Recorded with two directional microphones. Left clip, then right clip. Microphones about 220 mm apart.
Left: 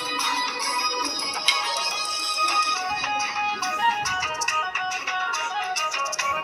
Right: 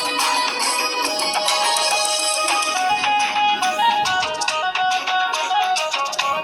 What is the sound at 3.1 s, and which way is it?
Music, 40° right (ahead or behind).